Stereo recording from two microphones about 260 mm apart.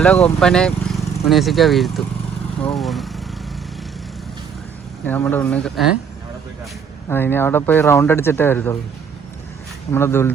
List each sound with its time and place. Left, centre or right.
0.0 s speech: centre
5.0 s speech: centre
7.1 s speech: centre
9.9 s speech: centre